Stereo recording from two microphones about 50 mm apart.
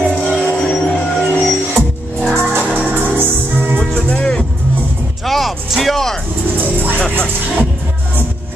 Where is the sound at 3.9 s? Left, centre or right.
Left.